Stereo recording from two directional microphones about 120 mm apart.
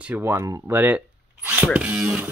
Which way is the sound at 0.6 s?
15° right (ahead or behind).